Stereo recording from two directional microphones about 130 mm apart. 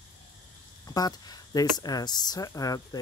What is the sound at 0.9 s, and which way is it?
Speech, 30° left (ahead or behind).